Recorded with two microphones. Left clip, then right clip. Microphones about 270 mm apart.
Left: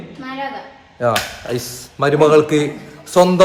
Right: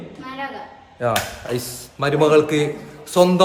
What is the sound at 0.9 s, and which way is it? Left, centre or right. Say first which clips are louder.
A man's voice: left 4 dB; centre.